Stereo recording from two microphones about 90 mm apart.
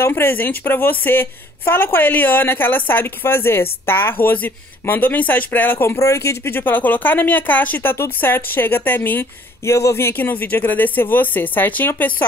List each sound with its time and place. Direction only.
0.0 s a woman's voice: 25° left (ahead or behind)